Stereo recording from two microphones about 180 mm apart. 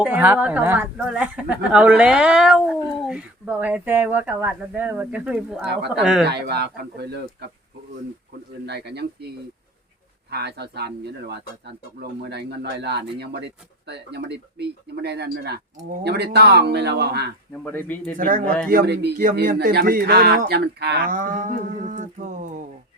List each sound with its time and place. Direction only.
0.0 s speech: 10° right (ahead or behind)
6.2 s speech: 65° right (ahead or behind)
8.6 s speech: 65° right (ahead or behind)
10.3 s speech: 65° right (ahead or behind)
17.6 s speech: 10° left (ahead or behind)
18.2 s speech: 50° right (ahead or behind)
18.7 s speech: 60° right (ahead or behind); by 22.6 s 45° right (ahead or behind)